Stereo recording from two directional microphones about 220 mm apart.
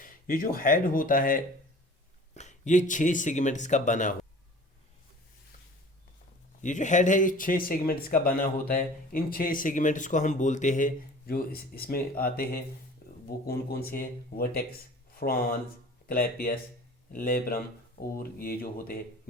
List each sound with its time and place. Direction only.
0.0 s speech: 40° left (ahead or behind)
6.6 s speech: 35° left (ahead or behind)